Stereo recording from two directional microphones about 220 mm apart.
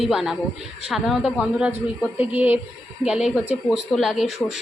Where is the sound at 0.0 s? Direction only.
Centre (ahead or behind).